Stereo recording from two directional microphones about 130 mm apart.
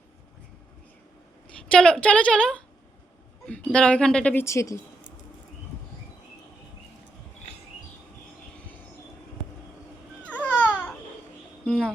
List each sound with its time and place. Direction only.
1.6 s a woman's voice: 5° left (ahead or behind)
4.4 s speech: 25° left (ahead or behind)
10.2 s babbling: 10° left (ahead or behind)
11.6 s music: 5° left (ahead or behind)